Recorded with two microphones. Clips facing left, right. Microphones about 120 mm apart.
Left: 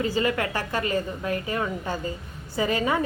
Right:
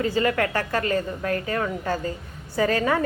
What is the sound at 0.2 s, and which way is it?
A woman's voice, 20° left (ahead or behind).